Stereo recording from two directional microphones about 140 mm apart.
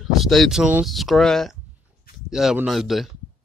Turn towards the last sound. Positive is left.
turn(degrees=0)  # may be behind; listen again after turning